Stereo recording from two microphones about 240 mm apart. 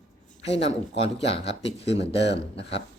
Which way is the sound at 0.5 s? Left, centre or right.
Left.